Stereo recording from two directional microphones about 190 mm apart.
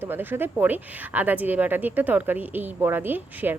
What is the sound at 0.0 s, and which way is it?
A woman's voice, 10° right (ahead or behind).